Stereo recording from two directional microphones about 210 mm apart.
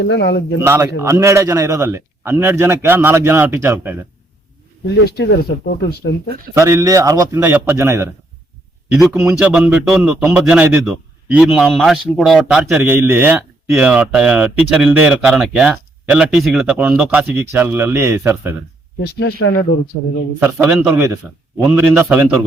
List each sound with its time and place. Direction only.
0.0 s speech: 55° left (ahead or behind)
0.6 s a man's voice: 10° right (ahead or behind)
4.9 s speech: 50° left (ahead or behind)
6.5 s a man's voice: 15° right (ahead or behind)
19.0 s speech: 50° left (ahead or behind)
20.4 s a man's voice: 10° right (ahead or behind)